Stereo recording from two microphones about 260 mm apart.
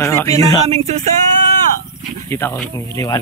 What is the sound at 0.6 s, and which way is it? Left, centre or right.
Speech, right.